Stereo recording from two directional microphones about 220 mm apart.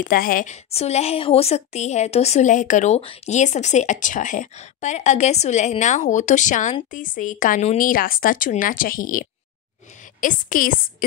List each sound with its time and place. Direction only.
0.0 s a woman's voice: 40° left (ahead or behind)